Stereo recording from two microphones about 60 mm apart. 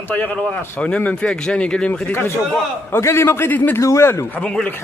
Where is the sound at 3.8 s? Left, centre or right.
Left.